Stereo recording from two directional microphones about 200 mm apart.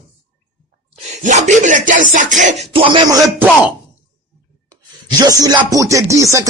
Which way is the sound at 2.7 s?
25° right (ahead or behind).